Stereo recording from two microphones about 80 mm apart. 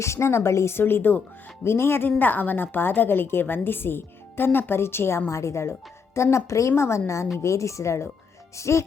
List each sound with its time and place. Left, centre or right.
0.0 s a woman's voice: left